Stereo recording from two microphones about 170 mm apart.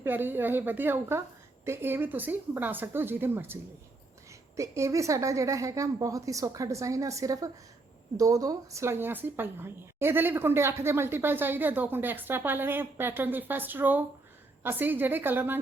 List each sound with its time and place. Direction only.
0.0 s a woman's voice: 10° right (ahead or behind)